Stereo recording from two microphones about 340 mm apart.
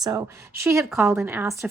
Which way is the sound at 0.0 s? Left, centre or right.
Centre.